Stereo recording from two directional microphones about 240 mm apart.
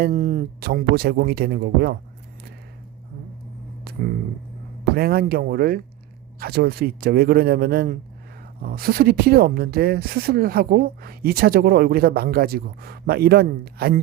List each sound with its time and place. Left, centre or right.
0.0 s speech: right
3.9 s a sound: right
4.9 s speech: right